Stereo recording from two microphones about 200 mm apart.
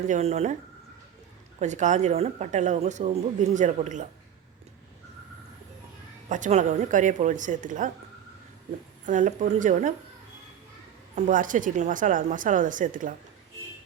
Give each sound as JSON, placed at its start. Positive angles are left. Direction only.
{"t": 0.1, "sound": "a woman's voice", "side_deg": -35}
{"t": 1.5, "sound": "a woman's voice", "side_deg": -35}
{"t": 6.2, "sound": "a woman's voice", "side_deg": -35}
{"t": 9.0, "sound": "a woman's voice", "side_deg": -40}
{"t": 11.1, "sound": "a woman's voice", "side_deg": -40}